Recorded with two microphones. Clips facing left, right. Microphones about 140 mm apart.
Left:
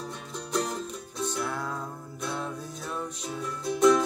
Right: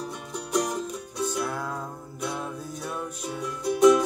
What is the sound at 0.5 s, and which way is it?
Music, 15° right (ahead or behind).